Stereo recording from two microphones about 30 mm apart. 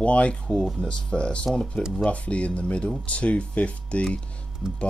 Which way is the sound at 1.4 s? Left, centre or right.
Left.